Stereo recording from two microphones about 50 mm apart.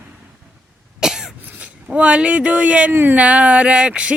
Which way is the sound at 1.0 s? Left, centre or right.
Centre.